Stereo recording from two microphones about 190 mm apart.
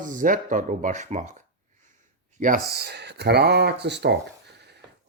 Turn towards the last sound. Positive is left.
turn(degrees=-65)  # may be behind; listen again after turning